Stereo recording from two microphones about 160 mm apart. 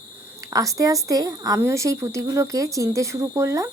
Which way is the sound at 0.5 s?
20° right (ahead or behind).